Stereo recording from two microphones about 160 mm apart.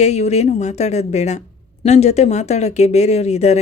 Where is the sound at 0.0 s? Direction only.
45° left (ahead or behind).